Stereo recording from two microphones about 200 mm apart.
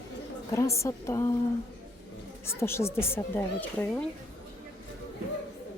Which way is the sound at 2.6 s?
15° left (ahead or behind).